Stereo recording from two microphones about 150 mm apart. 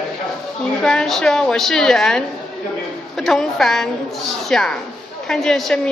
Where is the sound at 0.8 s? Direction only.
5° left (ahead or behind).